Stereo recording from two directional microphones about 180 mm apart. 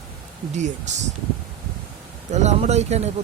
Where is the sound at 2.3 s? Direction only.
40° right (ahead or behind).